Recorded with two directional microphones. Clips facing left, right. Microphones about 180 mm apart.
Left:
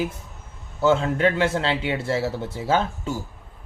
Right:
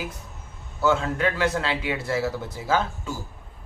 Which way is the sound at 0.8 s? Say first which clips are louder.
Left 3 dB; 25° left (ahead or behind).